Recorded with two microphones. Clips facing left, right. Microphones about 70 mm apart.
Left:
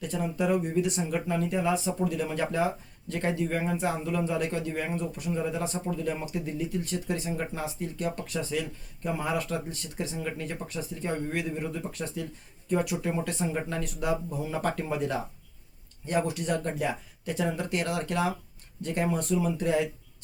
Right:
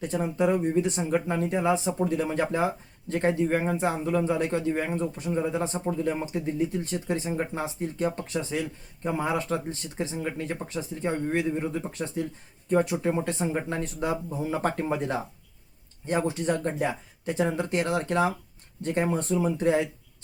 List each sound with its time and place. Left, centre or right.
0.0 s a man's voice: right